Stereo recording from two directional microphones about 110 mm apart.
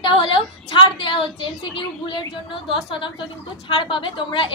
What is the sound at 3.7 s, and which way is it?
Speech, 50° left (ahead or behind).